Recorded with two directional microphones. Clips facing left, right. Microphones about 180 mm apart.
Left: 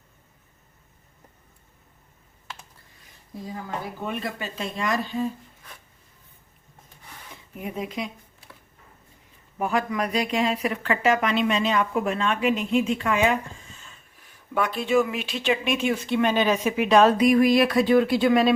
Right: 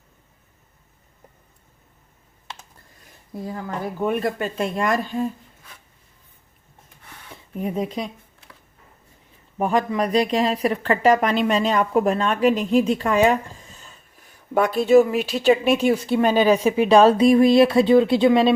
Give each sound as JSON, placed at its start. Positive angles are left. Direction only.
{"t": 4.0, "sound": "speech", "side_deg": -50}
{"t": 7.5, "sound": "speech", "side_deg": -35}
{"t": 9.6, "sound": "speech", "side_deg": -35}